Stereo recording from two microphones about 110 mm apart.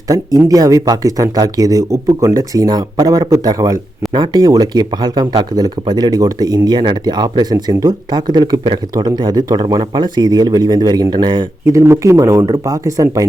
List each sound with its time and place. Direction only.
0.3 s speech: 35° right (ahead or behind)
11.6 s speech: 25° right (ahead or behind)